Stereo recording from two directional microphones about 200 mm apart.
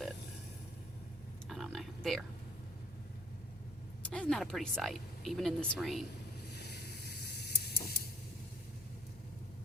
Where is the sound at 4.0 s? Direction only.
5° left (ahead or behind).